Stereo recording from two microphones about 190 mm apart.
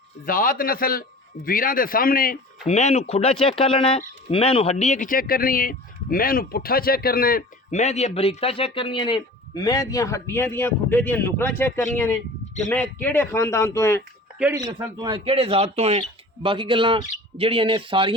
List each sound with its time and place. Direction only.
0.3 s speech: 50° left (ahead or behind)
2.6 s speech: 35° left (ahead or behind); by 14.0 s 15° left (ahead or behind)
14.6 s speech: 20° right (ahead or behind)